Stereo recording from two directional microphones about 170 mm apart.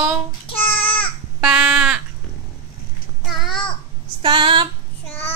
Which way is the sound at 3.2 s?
Centre (ahead or behind).